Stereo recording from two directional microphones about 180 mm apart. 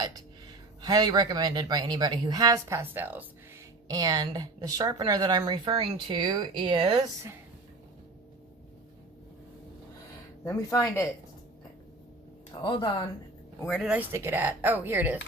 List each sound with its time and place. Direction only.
0.0 s speech: 20° right (ahead or behind)
3.8 s speech: 20° right (ahead or behind)
10.4 s speech: 15° left (ahead or behind)
12.6 s speech: 25° left (ahead or behind)
13.6 s speech: 5° left (ahead or behind)
14.0 s speech: 15° right (ahead or behind)